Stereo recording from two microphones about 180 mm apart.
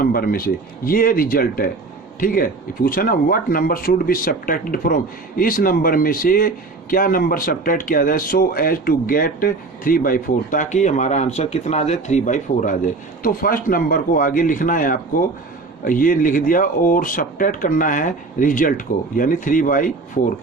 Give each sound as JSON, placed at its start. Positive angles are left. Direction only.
{"t": 0.0, "sound": "speech", "side_deg": 55}